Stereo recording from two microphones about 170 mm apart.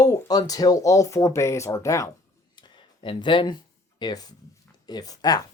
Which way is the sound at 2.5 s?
25° left (ahead or behind).